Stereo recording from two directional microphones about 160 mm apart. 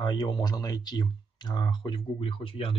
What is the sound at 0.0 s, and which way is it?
Speech, 25° left (ahead or behind).